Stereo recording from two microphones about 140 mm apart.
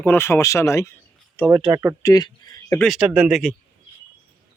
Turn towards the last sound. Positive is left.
turn(degrees=0)  # may be behind; listen again after turning